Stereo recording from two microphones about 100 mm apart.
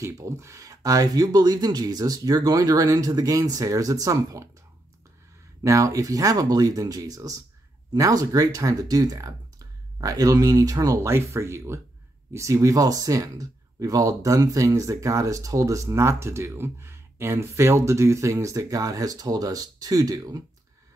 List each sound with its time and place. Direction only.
0.0 s speech: 30° right (ahead or behind)
5.6 s speech: 30° right (ahead or behind)
11.1 s speech: 25° right (ahead or behind)